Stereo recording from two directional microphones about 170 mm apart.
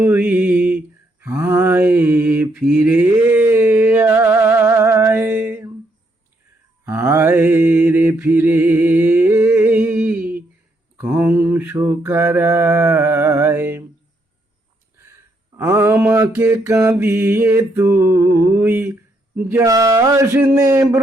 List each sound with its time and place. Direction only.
0.0 s mantra: 10° right (ahead or behind)
6.8 s mantra: 15° right (ahead or behind)
15.5 s mantra: 15° right (ahead or behind)